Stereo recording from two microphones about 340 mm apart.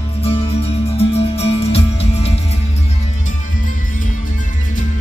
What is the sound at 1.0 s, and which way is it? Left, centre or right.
Music, centre.